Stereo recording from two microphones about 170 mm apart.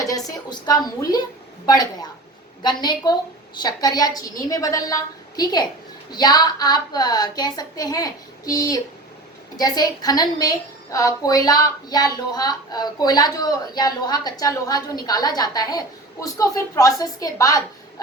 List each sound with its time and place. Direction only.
0.3 s speech: 25° left (ahead or behind)